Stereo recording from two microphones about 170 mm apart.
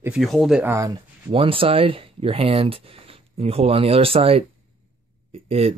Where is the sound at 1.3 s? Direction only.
30° right (ahead or behind).